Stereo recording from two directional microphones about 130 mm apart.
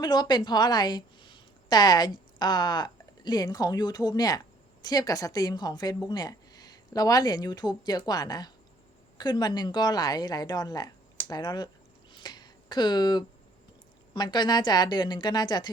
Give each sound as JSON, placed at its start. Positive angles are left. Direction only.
{"t": 0.0, "sound": "a woman's voice", "side_deg": 35}
{"t": 12.1, "sound": "a sound", "side_deg": 35}
{"t": 14.1, "sound": "a woman's voice", "side_deg": 35}